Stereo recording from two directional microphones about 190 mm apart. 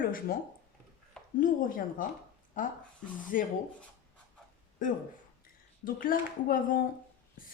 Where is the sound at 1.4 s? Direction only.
45° left (ahead or behind).